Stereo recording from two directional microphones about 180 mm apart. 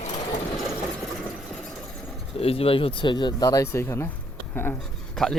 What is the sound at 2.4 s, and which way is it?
A man's voice, 30° left (ahead or behind).